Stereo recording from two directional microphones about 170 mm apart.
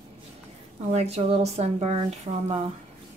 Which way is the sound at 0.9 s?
35° right (ahead or behind).